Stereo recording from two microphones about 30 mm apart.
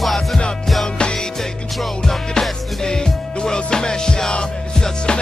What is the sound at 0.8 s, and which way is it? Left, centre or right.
Music, left.